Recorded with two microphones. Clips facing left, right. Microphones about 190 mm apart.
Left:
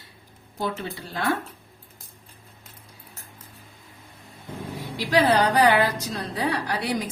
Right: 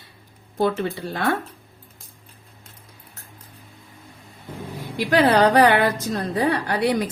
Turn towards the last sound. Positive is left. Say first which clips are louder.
# right 6 dB
turn(degrees=-60)  # may be behind; listen again after turning